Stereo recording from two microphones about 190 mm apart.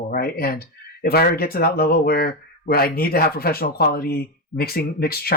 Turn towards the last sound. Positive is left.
turn(degrees=55)  # may be behind; listen again after turning